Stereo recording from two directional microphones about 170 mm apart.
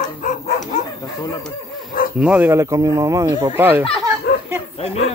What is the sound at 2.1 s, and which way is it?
Speech, 10° right (ahead or behind).